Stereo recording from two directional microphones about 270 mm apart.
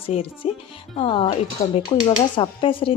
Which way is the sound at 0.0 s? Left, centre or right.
Left.